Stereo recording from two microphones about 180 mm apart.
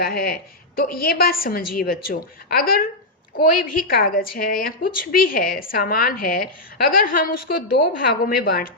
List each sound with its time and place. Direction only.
0.0 s a woman's voice: 55° left (ahead or behind)